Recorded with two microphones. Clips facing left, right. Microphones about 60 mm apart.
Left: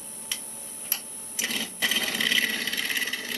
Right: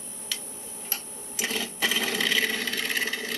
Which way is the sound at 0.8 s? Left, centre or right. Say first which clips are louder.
Right 1 dB; right.